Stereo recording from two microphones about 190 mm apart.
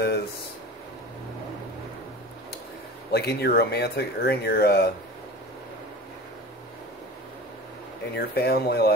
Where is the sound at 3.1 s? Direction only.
55° left (ahead or behind).